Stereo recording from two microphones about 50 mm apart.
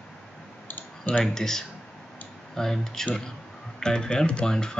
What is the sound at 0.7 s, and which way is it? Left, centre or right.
Clicking, left.